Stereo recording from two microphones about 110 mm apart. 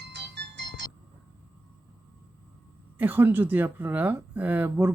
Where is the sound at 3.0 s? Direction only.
15° right (ahead or behind).